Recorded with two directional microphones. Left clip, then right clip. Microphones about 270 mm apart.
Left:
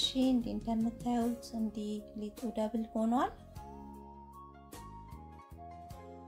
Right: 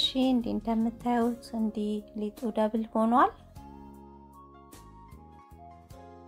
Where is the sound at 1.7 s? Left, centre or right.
Right.